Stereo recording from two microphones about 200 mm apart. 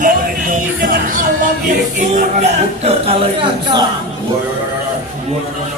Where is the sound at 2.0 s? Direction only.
35° right (ahead or behind).